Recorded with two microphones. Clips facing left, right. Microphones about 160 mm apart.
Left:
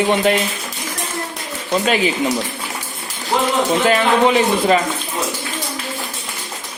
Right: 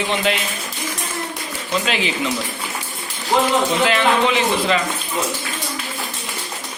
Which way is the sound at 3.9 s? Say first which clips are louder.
Left 3 dB; 40° left (ahead or behind).